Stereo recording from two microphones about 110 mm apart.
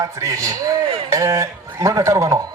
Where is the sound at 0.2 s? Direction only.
30° right (ahead or behind).